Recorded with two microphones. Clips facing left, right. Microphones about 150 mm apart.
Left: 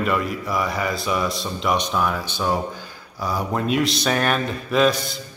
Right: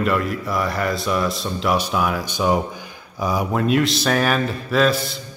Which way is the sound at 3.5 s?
Centre (ahead or behind).